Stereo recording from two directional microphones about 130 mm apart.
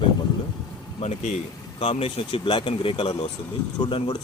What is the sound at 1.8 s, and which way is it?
Speech, 50° left (ahead or behind).